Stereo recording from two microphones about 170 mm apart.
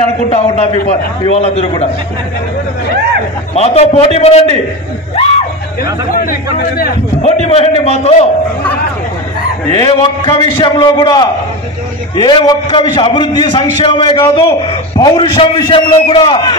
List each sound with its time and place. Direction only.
0.3 s a man's voice: 40° left (ahead or behind)
3.5 s a man's voice: 40° left (ahead or behind)
7.2 s a man's voice: 40° left (ahead or behind)
9.8 s a man's voice: 30° left (ahead or behind)